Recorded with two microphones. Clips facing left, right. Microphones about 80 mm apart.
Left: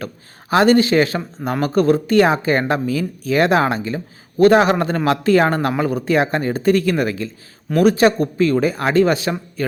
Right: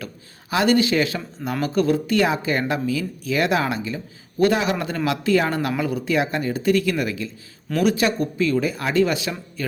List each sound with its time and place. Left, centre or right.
0.5 s speech: left